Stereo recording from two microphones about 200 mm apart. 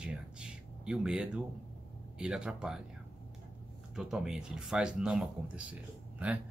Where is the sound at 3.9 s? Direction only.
Centre (ahead or behind).